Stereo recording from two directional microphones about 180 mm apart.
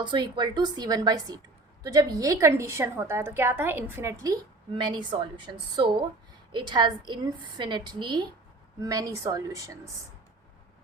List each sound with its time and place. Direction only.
0.0 s a woman's voice: 25° right (ahead or behind)